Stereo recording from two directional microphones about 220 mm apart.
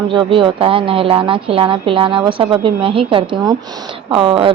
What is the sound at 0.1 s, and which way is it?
A woman's voice, 25° right (ahead or behind).